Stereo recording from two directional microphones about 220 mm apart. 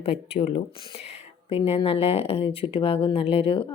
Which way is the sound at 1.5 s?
25° left (ahead or behind).